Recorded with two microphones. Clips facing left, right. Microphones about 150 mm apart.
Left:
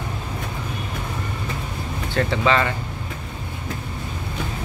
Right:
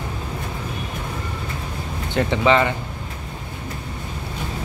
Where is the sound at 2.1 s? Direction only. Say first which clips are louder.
Right 2 dB; 20° right (ahead or behind).